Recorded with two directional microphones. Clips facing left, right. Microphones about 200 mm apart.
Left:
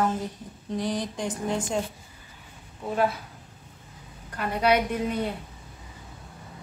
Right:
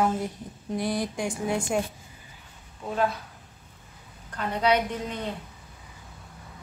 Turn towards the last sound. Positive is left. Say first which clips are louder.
# left 4 dB
turn(degrees=10)  # may be behind; listen again after turning